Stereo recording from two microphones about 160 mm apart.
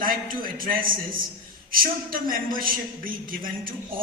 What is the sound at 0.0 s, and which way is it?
A man's voice, 60° right (ahead or behind).